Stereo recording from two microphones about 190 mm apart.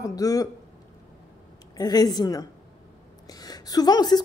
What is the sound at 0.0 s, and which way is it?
Speech, 20° left (ahead or behind).